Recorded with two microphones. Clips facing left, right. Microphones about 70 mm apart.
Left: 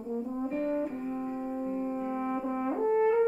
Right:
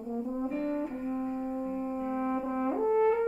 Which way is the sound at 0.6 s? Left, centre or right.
Centre.